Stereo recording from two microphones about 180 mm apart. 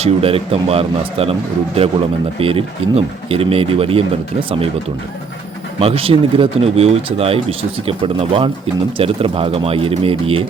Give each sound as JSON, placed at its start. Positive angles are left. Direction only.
{"t": 0.0, "sound": "speech", "side_deg": -30}
{"t": 5.8, "sound": "speech", "side_deg": -30}